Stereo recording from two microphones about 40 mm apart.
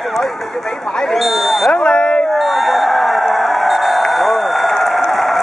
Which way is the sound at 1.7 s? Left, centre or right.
Left.